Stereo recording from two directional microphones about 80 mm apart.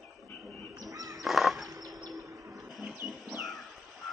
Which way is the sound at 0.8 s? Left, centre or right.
Right.